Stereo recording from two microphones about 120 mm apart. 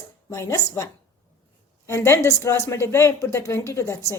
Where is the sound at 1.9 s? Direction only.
25° left (ahead or behind).